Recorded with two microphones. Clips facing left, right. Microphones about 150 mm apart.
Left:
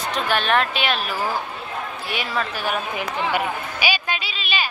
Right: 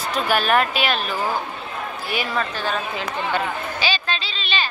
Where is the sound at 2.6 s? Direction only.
15° left (ahead or behind).